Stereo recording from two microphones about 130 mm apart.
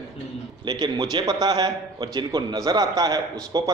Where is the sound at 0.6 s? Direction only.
35° right (ahead or behind).